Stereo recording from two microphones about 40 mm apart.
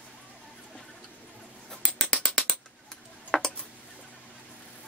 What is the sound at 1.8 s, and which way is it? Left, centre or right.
Mechanisms, centre.